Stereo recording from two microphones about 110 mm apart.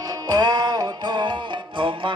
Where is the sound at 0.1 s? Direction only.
40° right (ahead or behind).